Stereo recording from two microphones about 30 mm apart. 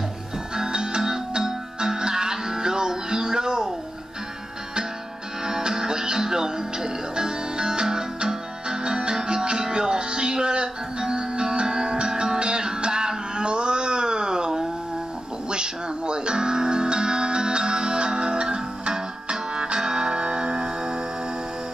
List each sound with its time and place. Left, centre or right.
0.6 s music: right
5.4 s music: right